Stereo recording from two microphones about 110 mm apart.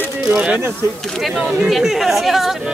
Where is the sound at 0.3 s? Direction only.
20° right (ahead or behind).